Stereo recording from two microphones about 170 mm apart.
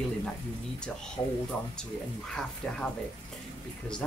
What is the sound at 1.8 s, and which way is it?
Speech, 5° left (ahead or behind).